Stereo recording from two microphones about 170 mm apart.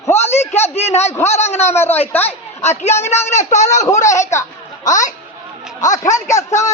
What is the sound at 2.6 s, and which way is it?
A man's voice, 40° left (ahead or behind).